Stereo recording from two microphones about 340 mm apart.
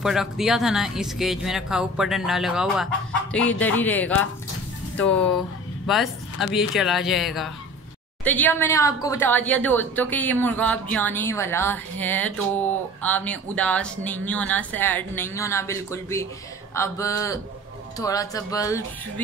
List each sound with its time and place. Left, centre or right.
0.0 s speech: centre